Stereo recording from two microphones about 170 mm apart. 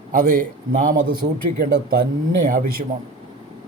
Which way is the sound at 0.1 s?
55° right (ahead or behind).